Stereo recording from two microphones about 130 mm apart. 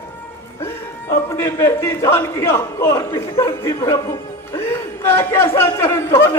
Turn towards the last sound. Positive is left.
turn(degrees=20)  # may be behind; listen again after turning